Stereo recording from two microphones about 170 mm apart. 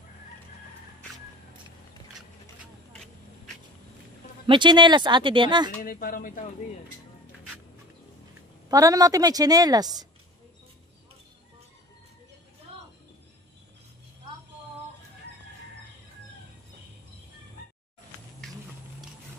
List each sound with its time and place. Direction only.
4.5 s a woman's voice: 25° right (ahead or behind)
5.8 s speech: 55° left (ahead or behind)
8.6 s a woman's voice: 20° right (ahead or behind)